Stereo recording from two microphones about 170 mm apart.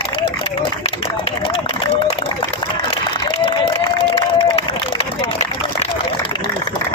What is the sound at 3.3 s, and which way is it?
Run, 30° left (ahead or behind).